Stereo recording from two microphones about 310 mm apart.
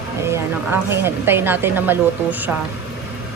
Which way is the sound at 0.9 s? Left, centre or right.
Centre.